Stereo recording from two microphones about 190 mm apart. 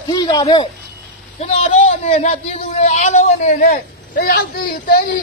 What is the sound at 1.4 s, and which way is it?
A man's voice, 40° left (ahead or behind).